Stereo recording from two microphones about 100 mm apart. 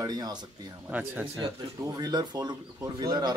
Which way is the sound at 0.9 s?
15° right (ahead or behind).